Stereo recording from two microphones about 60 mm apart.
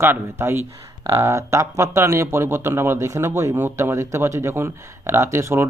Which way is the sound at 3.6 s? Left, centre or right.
Right.